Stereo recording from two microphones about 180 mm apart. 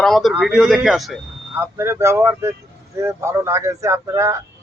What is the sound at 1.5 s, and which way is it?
Speech, 15° right (ahead or behind).